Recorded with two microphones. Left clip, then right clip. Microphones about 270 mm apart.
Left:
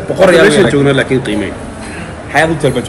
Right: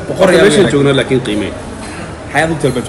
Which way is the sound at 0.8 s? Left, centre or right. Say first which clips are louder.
Left 1 dB; right.